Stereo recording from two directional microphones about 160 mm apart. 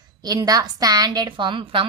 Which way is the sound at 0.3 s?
25° right (ahead or behind).